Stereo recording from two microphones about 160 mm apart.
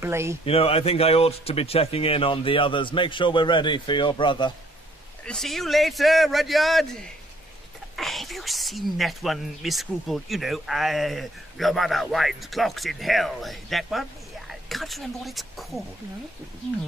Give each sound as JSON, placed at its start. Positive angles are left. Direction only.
{"t": 0.0, "sound": "speech", "side_deg": -15}
{"t": 0.5, "sound": "speech", "side_deg": 40}
{"t": 5.2, "sound": "speech", "side_deg": 5}